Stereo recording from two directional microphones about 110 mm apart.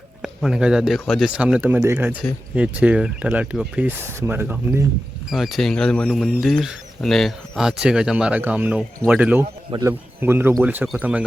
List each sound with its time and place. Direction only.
0.2 s speech: 5° right (ahead or behind)
5.3 s speech: centre (ahead or behind); by 10.8 s 15° right (ahead or behind)